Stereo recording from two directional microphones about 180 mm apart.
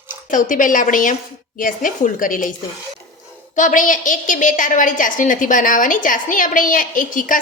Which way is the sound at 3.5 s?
45° left (ahead or behind).